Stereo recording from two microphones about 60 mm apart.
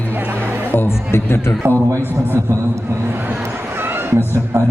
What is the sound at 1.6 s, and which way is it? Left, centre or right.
Speech, right.